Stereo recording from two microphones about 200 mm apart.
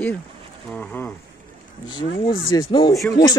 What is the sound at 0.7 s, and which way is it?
Speech, 5° left (ahead or behind).